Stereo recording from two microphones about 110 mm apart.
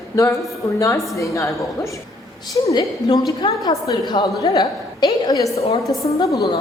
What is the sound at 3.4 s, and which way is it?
A woman's voice, 45° left (ahead or behind).